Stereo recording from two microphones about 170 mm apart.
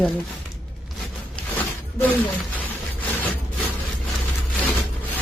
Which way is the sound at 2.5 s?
10° left (ahead or behind).